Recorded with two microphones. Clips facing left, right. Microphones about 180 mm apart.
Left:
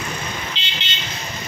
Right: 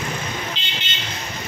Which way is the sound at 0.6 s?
45° right (ahead or behind).